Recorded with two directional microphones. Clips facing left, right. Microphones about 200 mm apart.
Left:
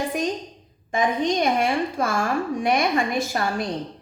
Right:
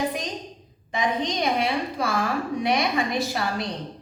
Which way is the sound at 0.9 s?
50° left (ahead or behind).